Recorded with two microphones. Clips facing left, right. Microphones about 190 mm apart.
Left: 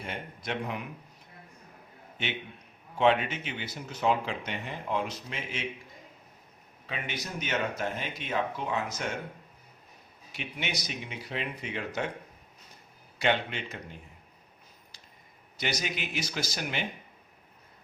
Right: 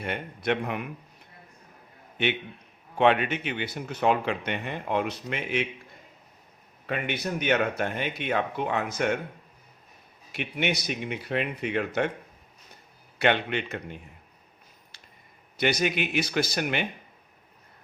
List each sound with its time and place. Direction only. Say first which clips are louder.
0.0 s speech: right 7 dB; 65° right (ahead or behind)
2.2 s speech: right 8 dB; 65° right (ahead or behind)
6.8 s speech: right 8 dB; 60° right (ahead or behind)
10.3 s speech: right 8 dB; 60° right (ahead or behind)
13.1 s speech: right 4 dB; 65° right (ahead or behind)
15.5 s speech: right 8 dB; 60° right (ahead or behind)